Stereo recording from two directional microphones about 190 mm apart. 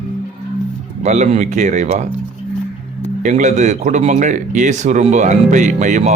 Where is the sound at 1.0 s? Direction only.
40° right (ahead or behind).